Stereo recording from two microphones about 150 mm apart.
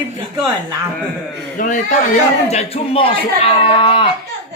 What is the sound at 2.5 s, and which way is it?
Speech, 45° left (ahead or behind).